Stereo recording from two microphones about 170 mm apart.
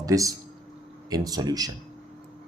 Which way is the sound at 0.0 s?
20° right (ahead or behind).